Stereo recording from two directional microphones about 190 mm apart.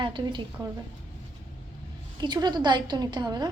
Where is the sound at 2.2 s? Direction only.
25° right (ahead or behind).